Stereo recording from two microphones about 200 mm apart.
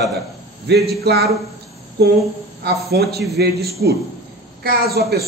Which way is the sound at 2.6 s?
50° right (ahead or behind).